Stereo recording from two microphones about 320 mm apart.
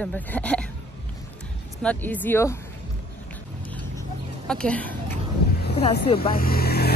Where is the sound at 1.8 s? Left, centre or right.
Centre.